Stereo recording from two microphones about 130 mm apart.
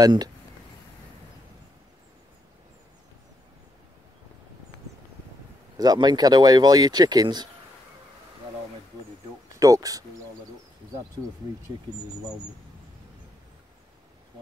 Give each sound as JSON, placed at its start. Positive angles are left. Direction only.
{"t": 0.0, "sound": "speech", "side_deg": -30}
{"t": 5.8, "sound": "speech", "side_deg": -30}
{"t": 9.6, "sound": "speech", "side_deg": -25}